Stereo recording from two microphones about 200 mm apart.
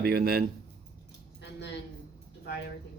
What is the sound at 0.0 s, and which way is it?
Speech, 50° right (ahead or behind).